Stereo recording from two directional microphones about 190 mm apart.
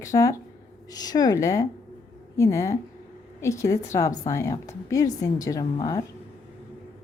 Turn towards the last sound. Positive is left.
turn(degrees=20)  # may be behind; listen again after turning